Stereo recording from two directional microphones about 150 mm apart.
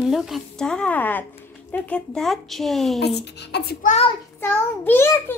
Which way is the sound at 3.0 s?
90° left.